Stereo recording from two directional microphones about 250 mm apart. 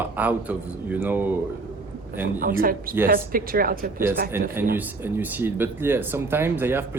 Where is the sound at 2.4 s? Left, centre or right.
Right.